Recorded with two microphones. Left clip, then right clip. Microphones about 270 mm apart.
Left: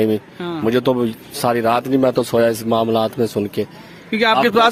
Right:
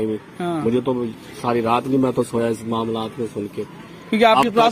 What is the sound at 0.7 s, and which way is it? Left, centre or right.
Speech, left.